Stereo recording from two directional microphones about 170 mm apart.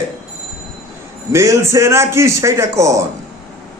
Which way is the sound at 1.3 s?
15° right (ahead or behind).